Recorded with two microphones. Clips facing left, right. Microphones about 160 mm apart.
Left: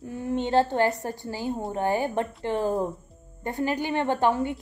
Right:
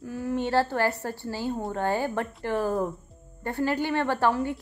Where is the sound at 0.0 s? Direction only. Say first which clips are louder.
Even; 25° left (ahead or behind).